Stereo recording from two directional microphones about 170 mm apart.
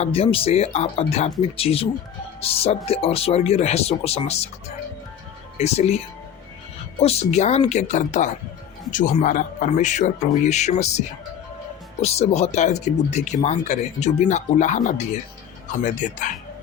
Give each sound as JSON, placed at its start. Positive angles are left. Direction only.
{"t": 0.0, "sound": "speech", "side_deg": 35}
{"t": 5.5, "sound": "speech", "side_deg": 40}
{"t": 7.0, "sound": "speech", "side_deg": 35}
{"t": 12.0, "sound": "speech", "side_deg": 40}